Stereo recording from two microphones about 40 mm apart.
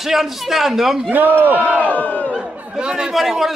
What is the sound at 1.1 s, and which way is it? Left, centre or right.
Speech, right.